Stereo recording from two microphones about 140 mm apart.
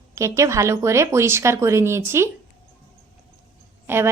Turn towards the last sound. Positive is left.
turn(degrees=-15)  # may be behind; listen again after turning